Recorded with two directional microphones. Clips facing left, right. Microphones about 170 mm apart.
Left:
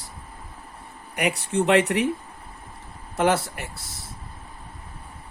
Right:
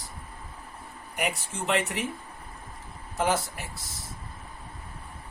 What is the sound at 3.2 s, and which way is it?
Speech, 65° left (ahead or behind).